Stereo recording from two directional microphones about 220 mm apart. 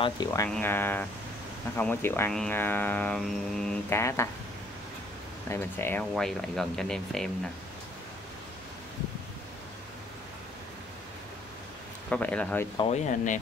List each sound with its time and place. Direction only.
0.0 s speech: 15° left (ahead or behind)
5.5 s speech: 10° left (ahead or behind)
12.1 s speech: 5° left (ahead or behind)
12.7 s speech: 30° left (ahead or behind)